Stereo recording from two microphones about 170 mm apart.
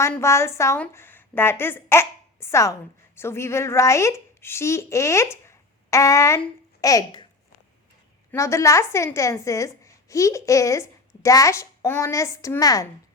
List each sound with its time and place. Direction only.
0.0 s a woman's voice: 15° left (ahead or behind)
8.3 s a woman's voice: 15° left (ahead or behind)